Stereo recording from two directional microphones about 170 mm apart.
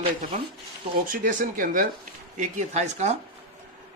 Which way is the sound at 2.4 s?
45° right (ahead or behind).